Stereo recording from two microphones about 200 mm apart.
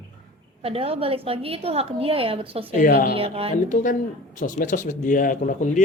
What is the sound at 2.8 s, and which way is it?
Speech, 45° left (ahead or behind).